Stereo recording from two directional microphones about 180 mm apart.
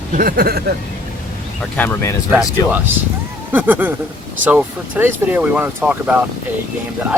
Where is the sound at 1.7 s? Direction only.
10° left (ahead or behind).